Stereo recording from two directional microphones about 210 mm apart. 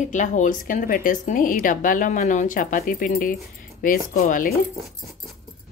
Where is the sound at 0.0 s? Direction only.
35° left (ahead or behind).